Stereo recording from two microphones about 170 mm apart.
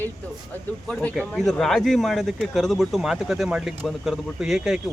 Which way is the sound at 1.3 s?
Centre (ahead or behind).